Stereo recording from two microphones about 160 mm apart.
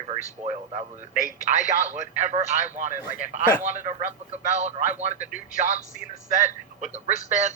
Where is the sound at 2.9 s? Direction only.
60° left (ahead or behind).